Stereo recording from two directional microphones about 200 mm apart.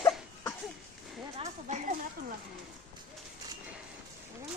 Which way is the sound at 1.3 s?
35° right (ahead or behind).